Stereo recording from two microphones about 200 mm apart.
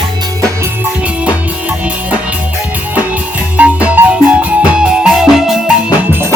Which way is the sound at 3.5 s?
5° right (ahead or behind).